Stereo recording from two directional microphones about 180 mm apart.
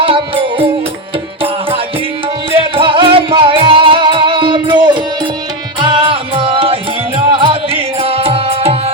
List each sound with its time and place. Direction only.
0.0 s music: 30° right (ahead or behind)
2.5 s music: 30° right (ahead or behind)